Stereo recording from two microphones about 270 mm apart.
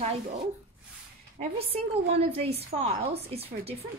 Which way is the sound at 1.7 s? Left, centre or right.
Right.